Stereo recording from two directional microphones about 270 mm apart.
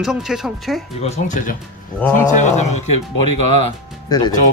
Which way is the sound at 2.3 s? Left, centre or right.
Left.